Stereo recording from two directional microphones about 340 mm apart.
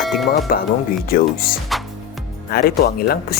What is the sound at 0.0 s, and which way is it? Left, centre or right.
Music, centre.